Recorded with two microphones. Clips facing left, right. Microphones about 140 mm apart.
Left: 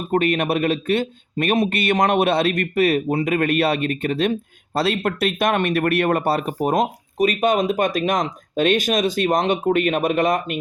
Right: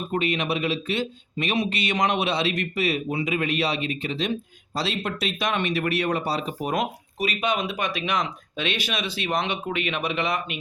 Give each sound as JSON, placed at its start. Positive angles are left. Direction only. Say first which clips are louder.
{"t": 0.1, "sound": "speech", "louder": "left 7 dB", "side_deg": 50}